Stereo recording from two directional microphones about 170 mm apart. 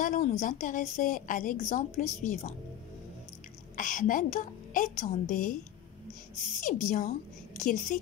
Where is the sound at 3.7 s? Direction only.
50° left (ahead or behind).